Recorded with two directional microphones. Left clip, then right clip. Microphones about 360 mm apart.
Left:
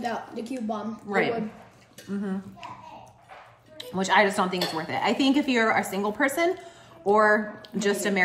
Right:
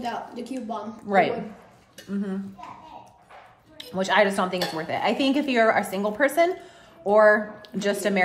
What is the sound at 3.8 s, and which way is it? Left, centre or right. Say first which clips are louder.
A woman's voice: right 1 dB; centre.